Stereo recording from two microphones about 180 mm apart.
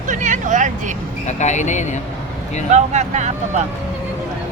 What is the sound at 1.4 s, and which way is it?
Speech, 40° left (ahead or behind).